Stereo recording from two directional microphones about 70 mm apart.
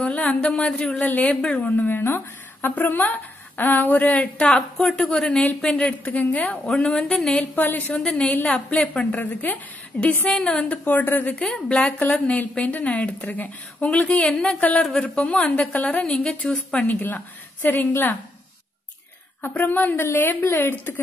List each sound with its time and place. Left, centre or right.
0.6 s a woman's voice: centre
1.7 s speech: left
4.5 s a woman's voice: centre
7.5 s speech: left
7.9 s a woman's voice: centre
11.4 s a woman's voice: centre
15.0 s a woman's voice: centre
19.5 s speech: left